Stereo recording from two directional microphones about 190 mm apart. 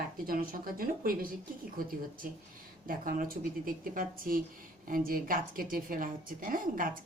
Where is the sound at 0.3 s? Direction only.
50° right (ahead or behind).